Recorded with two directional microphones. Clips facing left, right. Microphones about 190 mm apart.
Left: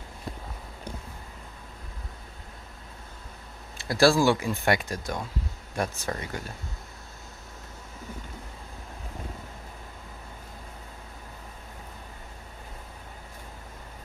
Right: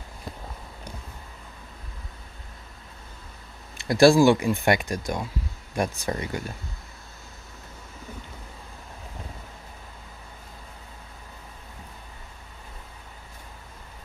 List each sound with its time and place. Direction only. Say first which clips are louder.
3.7 s speech: right 5 dB; 20° right (ahead or behind)